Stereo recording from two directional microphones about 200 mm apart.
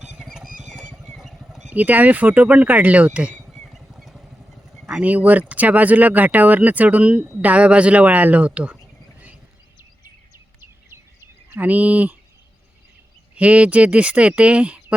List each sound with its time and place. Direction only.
0.0 s vehicle: centre (ahead or behind)
1.7 s speech: 10° right (ahead or behind)
10.0 s a sound: 15° right (ahead or behind)
13.3 s speech: 5° right (ahead or behind)